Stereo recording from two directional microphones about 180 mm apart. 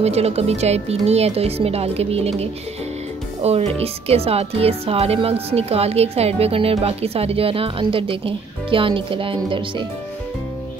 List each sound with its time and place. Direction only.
0.0 s a woman's voice: 35° right (ahead or behind)